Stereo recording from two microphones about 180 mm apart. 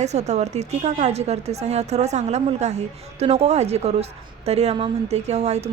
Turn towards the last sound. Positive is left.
turn(degrees=-40)  # may be behind; listen again after turning